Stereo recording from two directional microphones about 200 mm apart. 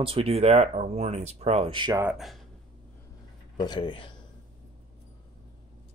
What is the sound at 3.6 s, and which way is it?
Speech, 20° left (ahead or behind).